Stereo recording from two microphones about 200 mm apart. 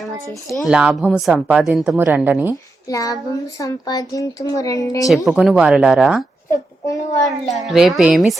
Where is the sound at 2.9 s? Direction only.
15° left (ahead or behind).